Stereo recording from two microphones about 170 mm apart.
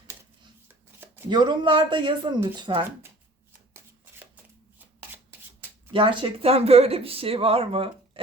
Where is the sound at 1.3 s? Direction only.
25° right (ahead or behind).